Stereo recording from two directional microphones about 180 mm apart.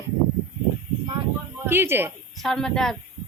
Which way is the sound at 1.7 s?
15° right (ahead or behind).